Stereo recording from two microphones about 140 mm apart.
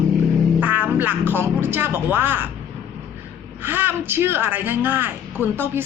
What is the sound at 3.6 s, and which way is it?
A man's voice, 15° right (ahead or behind).